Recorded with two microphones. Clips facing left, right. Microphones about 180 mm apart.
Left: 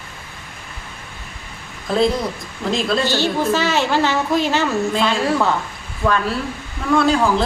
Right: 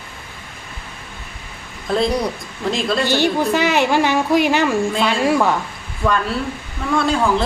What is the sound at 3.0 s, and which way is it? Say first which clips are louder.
Speech: right 2 dB; 15° right (ahead or behind).